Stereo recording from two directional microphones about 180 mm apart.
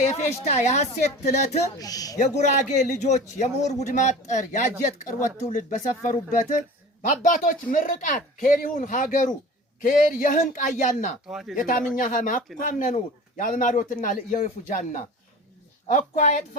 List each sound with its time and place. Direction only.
0.0 s a man's voice: 40° left (ahead or behind)
1.8 s speech: 20° left (ahead or behind)
2.1 s a man's voice: 40° left (ahead or behind)
5.5 s a man's voice: 45° left (ahead or behind)
11.3 s speech: 5° right (ahead or behind)
11.5 s a man's voice: 50° left (ahead or behind)